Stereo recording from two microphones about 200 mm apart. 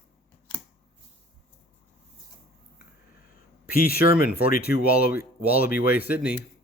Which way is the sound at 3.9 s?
50° left (ahead or behind).